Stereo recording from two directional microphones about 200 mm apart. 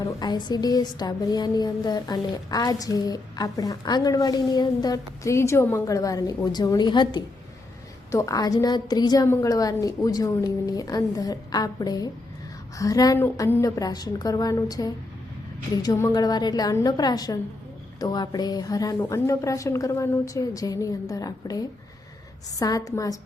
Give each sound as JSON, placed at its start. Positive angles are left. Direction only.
{"t": 0.0, "sound": "a woman's voice", "side_deg": 20}